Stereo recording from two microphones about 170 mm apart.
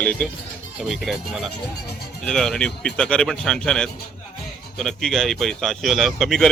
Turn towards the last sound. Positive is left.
turn(degrees=0)  # may be behind; listen again after turning